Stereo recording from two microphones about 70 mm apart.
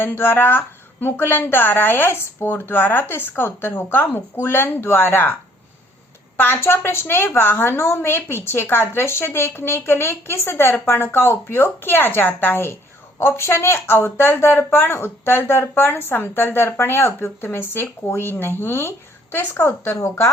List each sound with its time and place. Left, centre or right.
0.0 s a woman's voice: left
6.4 s a woman's voice: left